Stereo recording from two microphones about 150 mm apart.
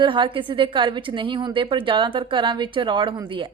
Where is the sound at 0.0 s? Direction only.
35° right (ahead or behind).